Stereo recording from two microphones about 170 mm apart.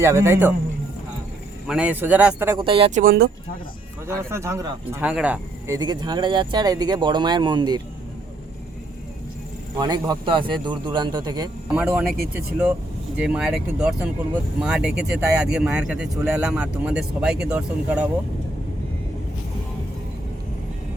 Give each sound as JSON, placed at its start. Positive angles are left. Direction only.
{"t": 0.0, "sound": "speech", "side_deg": -15}
{"t": 1.6, "sound": "speech", "side_deg": -5}
{"t": 2.6, "sound": "speech", "side_deg": -30}
{"t": 3.0, "sound": "speech", "side_deg": -55}
{"t": 4.0, "sound": "speech", "side_deg": -15}
{"t": 9.7, "sound": "speech", "side_deg": -25}
{"t": 11.7, "sound": "speech", "side_deg": -5}
{"t": 13.1, "sound": "speech", "side_deg": -5}